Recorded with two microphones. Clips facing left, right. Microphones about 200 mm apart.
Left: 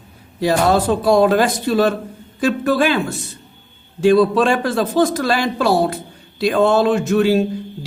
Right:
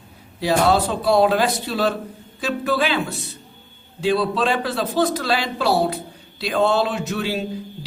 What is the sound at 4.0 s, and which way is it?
A man's voice, 50° left (ahead or behind).